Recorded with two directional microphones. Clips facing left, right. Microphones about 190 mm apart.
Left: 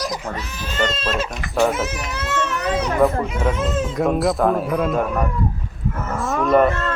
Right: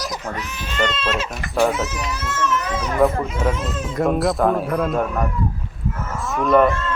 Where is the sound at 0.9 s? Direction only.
45° left (ahead or behind).